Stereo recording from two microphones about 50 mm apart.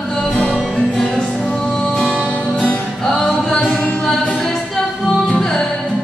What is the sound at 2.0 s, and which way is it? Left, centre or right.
Music, left.